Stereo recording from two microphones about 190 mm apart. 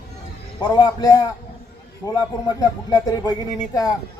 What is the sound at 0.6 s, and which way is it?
A man's voice, 20° left (ahead or behind).